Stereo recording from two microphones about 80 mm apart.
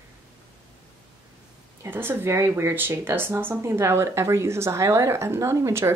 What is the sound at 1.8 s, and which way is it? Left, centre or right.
Speech, right.